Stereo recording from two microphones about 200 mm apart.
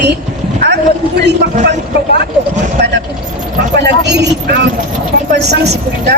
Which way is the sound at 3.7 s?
55° right (ahead or behind).